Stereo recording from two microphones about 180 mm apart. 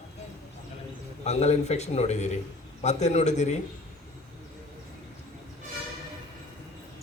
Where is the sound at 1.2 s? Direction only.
35° left (ahead or behind).